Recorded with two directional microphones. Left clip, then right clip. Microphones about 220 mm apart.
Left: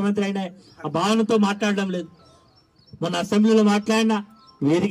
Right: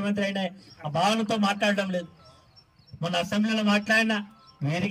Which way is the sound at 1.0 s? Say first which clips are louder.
Left 6 dB; 30° left (ahead or behind).